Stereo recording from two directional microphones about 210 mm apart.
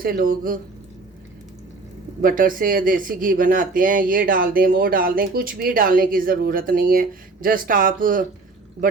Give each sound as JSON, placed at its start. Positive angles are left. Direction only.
{"t": 0.0, "sound": "speech", "side_deg": -45}
{"t": 2.2, "sound": "speech", "side_deg": -40}